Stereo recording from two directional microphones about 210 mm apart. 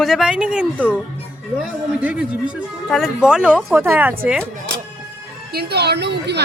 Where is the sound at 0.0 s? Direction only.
Centre (ahead or behind).